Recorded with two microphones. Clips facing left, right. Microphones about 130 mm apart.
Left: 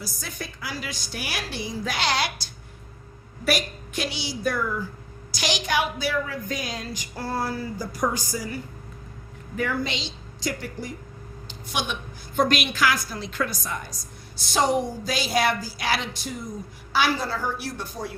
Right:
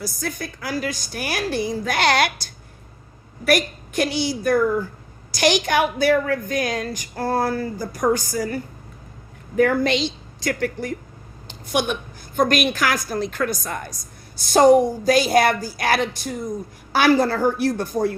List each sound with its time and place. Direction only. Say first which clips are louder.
0.0 s a woman's voice: right 7 dB; 50° right (ahead or behind)
11.4 s a sound: right 8 dB; 50° right (ahead or behind)
12.4 s a woman's voice: right 3 dB; 45° right (ahead or behind)